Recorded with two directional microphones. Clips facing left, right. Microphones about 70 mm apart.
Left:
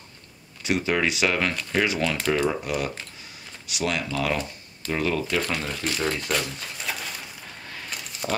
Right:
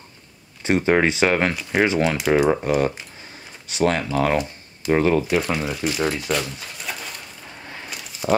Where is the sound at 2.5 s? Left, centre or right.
Right.